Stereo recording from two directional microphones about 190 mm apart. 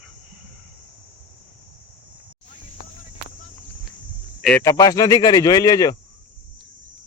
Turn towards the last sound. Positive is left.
turn(degrees=20)  # may be behind; listen again after turning